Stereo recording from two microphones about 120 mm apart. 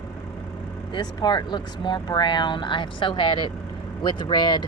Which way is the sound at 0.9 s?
35° left (ahead or behind).